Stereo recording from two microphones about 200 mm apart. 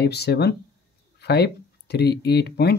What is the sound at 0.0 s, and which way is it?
Speech, 55° left (ahead or behind).